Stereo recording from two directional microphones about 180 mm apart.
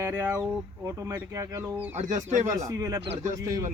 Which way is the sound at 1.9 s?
40° right (ahead or behind).